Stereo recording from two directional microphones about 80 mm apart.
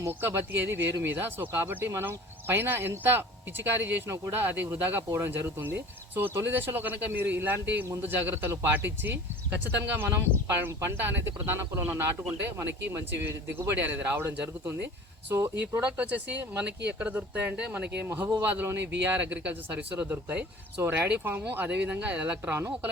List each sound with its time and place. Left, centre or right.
0.1 s speech: right
16.0 s speech: centre